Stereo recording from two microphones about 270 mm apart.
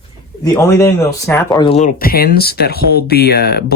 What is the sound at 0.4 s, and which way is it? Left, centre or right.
Speech, centre.